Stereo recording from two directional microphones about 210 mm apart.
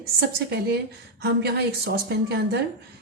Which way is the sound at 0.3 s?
50° right (ahead or behind).